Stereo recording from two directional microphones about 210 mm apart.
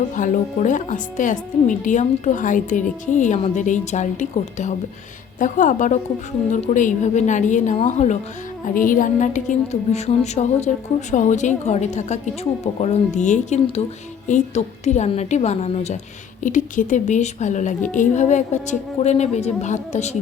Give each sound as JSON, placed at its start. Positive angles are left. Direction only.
{"t": 0.1, "sound": "speech", "side_deg": 35}